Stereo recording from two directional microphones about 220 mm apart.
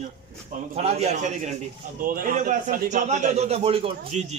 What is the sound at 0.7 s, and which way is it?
A man's voice, 30° right (ahead or behind).